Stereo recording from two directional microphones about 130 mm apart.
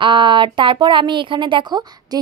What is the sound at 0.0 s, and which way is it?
A woman's voice, 40° right (ahead or behind).